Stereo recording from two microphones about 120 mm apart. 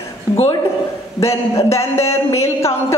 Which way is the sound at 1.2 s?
25° left (ahead or behind).